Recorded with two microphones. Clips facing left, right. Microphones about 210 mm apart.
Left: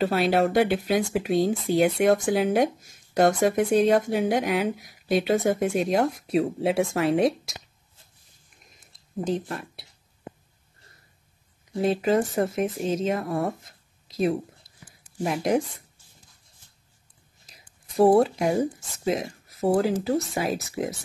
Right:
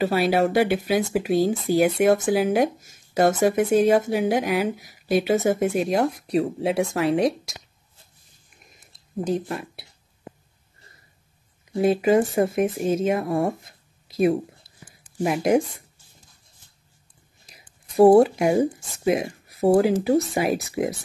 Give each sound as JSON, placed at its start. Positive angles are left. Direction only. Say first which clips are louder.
{"t": 0.0, "sound": "speech", "louder": "right 1 dB", "side_deg": 0}
{"t": 9.3, "sound": "speech", "louder": "right 3 dB", "side_deg": -10}
{"t": 11.7, "sound": "speech", "louder": "right 4 dB", "side_deg": -10}
{"t": 14.0, "sound": "a sound", "louder": "right 4 dB", "side_deg": -10}
{"t": 15.2, "sound": "speech", "louder": "right 4 dB", "side_deg": -10}
{"t": 18.1, "sound": "speech", "louder": "right 4 dB", "side_deg": -10}